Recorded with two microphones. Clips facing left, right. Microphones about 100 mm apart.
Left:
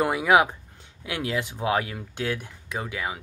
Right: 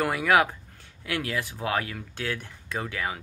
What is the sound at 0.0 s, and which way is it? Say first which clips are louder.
Speech: left 2 dB; 20° left (ahead or behind).